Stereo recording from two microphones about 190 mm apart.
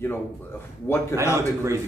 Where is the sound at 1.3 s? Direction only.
15° right (ahead or behind).